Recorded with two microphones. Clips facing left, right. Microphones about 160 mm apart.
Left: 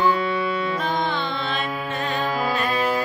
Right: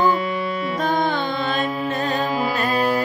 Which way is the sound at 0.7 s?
45° right (ahead or behind).